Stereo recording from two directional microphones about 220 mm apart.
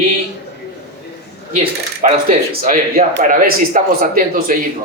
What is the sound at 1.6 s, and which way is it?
Speech, 30° right (ahead or behind).